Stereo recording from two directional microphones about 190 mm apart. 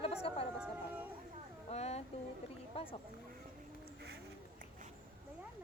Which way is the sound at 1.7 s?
35° left (ahead or behind).